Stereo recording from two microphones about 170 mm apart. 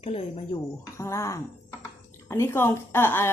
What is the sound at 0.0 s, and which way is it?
Speech, 35° left (ahead or behind).